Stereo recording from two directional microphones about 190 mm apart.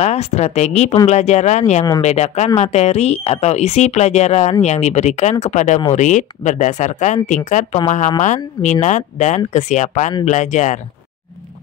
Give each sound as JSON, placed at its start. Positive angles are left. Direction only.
{"t": 0.0, "sound": "speech", "side_deg": 35}